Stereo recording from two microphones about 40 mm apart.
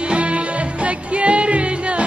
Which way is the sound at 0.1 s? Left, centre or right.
Right.